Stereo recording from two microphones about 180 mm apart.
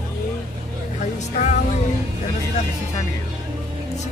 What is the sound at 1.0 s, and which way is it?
Speech, 40° left (ahead or behind).